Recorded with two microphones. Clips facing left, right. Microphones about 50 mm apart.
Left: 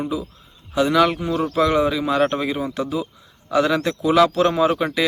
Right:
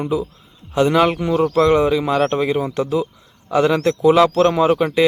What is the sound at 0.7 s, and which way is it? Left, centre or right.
Speech, right.